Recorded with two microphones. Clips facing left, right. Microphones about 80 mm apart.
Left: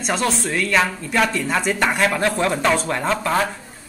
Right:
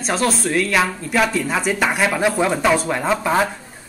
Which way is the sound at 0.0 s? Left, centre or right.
Centre.